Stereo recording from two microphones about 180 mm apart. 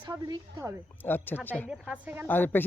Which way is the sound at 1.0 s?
10° left (ahead or behind).